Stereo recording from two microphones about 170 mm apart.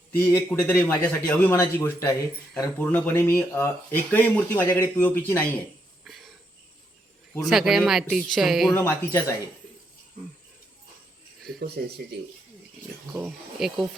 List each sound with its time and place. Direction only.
0.2 s a man's voice: 10° left (ahead or behind)
6.1 s a sound: centre (ahead or behind)
7.4 s speech: centre (ahead or behind)
8.7 s a man's voice: 10° left (ahead or behind)
11.8 s speech: 70° right (ahead or behind)
13.1 s speech: 5° right (ahead or behind)